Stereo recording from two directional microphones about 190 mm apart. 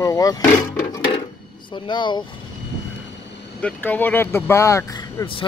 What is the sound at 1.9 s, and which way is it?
Speech, 25° left (ahead or behind).